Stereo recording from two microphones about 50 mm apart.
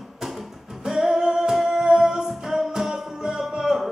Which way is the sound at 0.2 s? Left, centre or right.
Centre.